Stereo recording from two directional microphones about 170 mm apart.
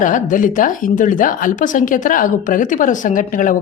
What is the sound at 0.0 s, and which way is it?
Speech, 50° left (ahead or behind).